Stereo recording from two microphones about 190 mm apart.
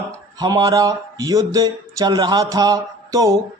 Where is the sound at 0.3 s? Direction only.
20° right (ahead or behind).